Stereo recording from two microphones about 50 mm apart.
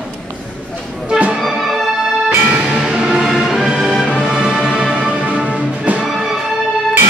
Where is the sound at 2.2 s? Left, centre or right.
Right.